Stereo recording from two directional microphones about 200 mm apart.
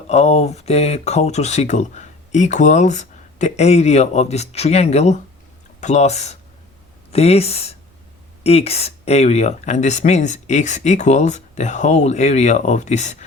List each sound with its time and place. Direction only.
0.1 s speech: 30° left (ahead or behind)